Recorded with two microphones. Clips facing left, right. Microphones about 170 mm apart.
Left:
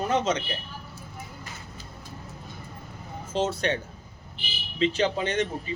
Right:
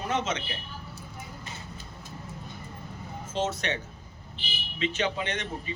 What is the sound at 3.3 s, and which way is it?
Speech, 35° left (ahead or behind).